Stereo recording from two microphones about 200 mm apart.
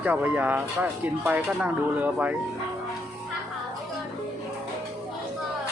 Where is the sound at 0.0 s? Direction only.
10° right (ahead or behind).